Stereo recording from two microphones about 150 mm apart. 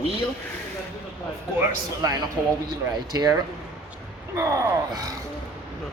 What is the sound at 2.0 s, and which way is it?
Speech, 25° right (ahead or behind).